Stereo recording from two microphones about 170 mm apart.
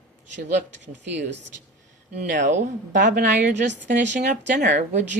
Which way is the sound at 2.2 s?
50° right (ahead or behind).